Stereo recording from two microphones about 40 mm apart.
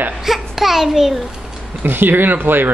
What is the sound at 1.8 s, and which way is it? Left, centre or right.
Speech, right.